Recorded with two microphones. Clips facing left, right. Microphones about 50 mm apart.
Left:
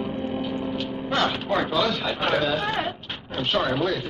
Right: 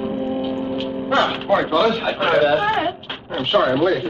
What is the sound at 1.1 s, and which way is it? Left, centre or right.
Music, centre.